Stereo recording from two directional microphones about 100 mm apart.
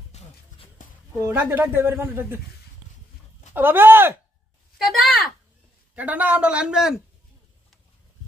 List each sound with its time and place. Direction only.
0.1 s music: 90° left
1.2 s speech: 20° right (ahead or behind)
3.5 s speech: 20° right (ahead or behind)
4.7 s speech: centre (ahead or behind)
5.9 s speech: 15° right (ahead or behind)